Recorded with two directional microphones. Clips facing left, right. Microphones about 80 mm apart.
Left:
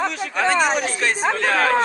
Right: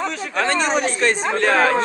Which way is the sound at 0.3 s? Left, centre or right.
Centre.